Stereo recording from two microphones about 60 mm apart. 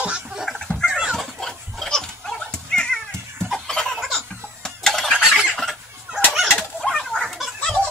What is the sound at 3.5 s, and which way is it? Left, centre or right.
Chicken, centre.